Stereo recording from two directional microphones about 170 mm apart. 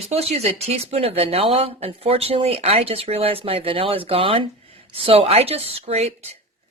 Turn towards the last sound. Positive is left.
turn(degrees=-35)  # may be behind; listen again after turning